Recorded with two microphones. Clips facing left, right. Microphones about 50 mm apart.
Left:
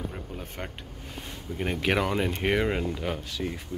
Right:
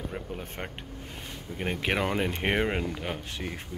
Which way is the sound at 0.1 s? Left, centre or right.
Right.